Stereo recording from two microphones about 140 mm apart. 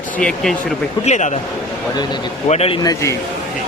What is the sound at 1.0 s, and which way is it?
Speech, 55° left (ahead or behind).